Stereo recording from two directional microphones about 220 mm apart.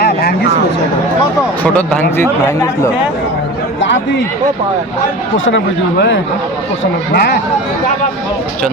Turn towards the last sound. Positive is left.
turn(degrees=45)  # may be behind; listen again after turning